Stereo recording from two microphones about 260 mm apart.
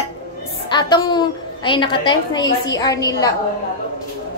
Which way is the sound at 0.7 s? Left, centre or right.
Centre.